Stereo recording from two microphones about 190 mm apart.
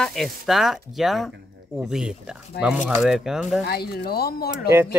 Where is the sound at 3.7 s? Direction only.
55° left (ahead or behind).